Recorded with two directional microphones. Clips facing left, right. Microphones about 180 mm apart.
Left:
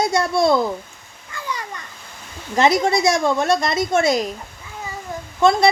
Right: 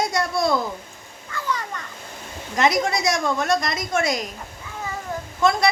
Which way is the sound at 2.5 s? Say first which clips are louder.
Left 4 dB; 30° left (ahead or behind).